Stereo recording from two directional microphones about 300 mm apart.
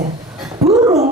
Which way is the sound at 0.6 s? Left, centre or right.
Right.